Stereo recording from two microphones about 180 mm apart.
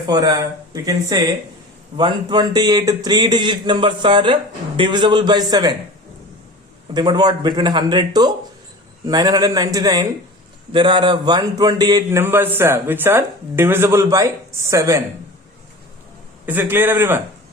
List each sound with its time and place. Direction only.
0.1 s speech: 20° right (ahead or behind)
6.9 s a man's voice: 25° right (ahead or behind)
16.5 s a man's voice: 10° right (ahead or behind)